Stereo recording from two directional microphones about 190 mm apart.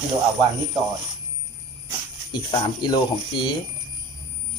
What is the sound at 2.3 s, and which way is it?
Speech, 25° left (ahead or behind).